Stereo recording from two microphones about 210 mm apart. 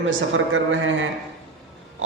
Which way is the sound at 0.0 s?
65° right (ahead or behind).